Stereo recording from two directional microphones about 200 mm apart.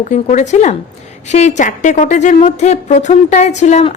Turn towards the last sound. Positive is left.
turn(degrees=35)  # may be behind; listen again after turning